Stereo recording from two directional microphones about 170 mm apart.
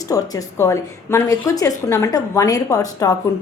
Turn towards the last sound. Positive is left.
turn(degrees=20)  # may be behind; listen again after turning